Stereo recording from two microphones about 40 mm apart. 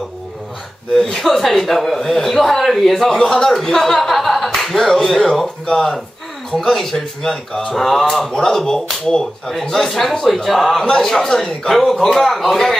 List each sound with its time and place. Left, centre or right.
1.1 s speech: centre